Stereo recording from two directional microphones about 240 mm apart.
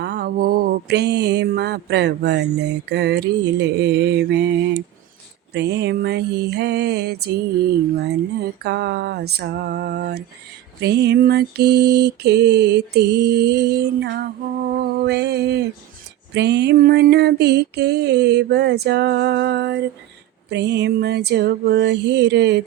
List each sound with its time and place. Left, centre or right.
0.0 s mantra: right
5.5 s mantra: right
8.6 s mantra: right